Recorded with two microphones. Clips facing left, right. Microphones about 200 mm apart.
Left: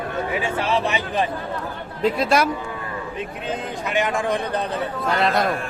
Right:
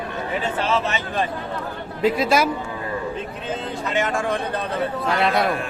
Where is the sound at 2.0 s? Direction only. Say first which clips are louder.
Even; centre (ahead or behind).